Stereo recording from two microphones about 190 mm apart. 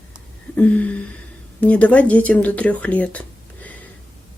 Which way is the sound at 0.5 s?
5° left (ahead or behind).